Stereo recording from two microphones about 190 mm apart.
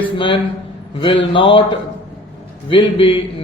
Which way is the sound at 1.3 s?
25° left (ahead or behind).